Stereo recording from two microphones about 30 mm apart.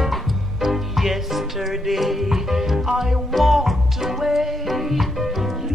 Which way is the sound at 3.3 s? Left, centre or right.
Centre.